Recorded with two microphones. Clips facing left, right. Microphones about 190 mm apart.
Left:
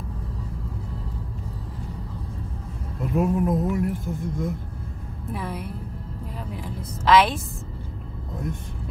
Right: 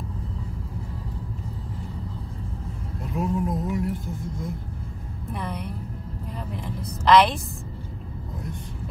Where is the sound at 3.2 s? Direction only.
55° left (ahead or behind).